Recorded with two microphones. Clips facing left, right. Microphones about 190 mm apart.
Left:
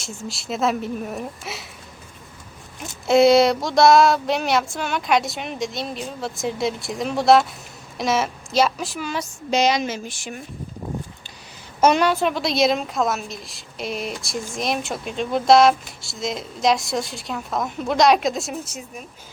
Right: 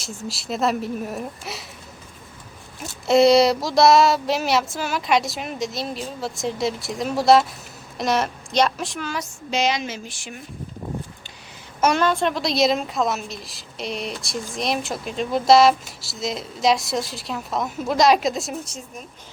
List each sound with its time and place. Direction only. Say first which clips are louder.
0.0 s child singing: right 1 dB; centre (ahead or behind)
2.8 s child singing: even; centre (ahead or behind)
7.9 s a woman's voice: even; centre (ahead or behind)
9.5 s a woman's voice: left 3 dB; 40° left (ahead or behind)
11.9 s child singing: left 1 dB; 5° left (ahead or behind)